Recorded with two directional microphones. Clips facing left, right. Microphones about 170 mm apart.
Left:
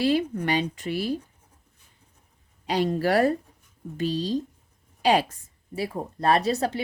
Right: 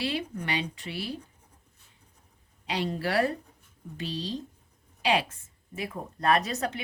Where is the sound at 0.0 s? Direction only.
45° left (ahead or behind).